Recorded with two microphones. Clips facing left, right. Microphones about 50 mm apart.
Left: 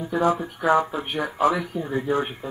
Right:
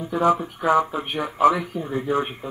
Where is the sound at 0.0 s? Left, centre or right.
Centre.